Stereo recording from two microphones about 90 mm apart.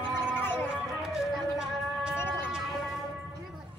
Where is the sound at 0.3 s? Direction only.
25° left (ahead or behind).